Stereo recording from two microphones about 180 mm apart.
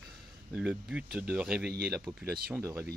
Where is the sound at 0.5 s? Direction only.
5° right (ahead or behind).